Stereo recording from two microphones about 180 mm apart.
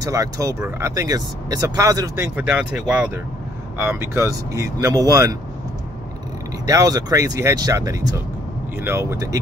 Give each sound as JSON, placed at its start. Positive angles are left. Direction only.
{"t": 0.0, "sound": "speech", "side_deg": -20}
{"t": 6.6, "sound": "speech", "side_deg": -20}